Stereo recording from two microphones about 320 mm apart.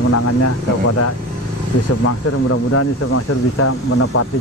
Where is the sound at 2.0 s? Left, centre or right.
Left.